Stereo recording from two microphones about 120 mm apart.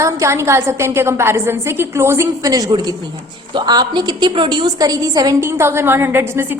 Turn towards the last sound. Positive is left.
turn(degrees=-20)  # may be behind; listen again after turning